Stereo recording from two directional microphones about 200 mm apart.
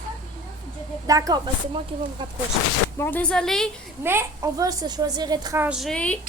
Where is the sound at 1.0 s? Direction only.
15° right (ahead or behind).